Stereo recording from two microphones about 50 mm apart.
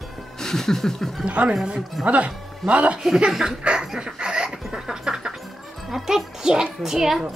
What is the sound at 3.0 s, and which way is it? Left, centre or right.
Speech, centre.